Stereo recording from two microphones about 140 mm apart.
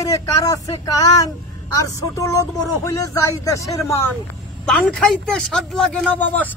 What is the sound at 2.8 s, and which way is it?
Speech, 20° left (ahead or behind).